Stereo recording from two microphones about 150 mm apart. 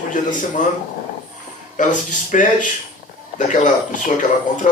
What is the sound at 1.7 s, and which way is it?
Speech, 55° left (ahead or behind).